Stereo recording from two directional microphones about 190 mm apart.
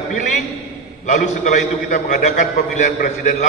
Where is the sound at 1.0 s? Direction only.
40° left (ahead or behind).